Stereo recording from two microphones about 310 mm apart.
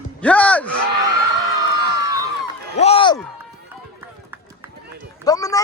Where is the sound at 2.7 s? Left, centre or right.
Centre.